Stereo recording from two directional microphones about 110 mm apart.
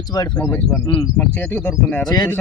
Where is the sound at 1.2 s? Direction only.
15° left (ahead or behind).